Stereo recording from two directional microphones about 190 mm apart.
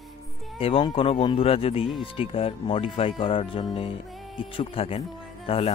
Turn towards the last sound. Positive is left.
turn(degrees=30)  # may be behind; listen again after turning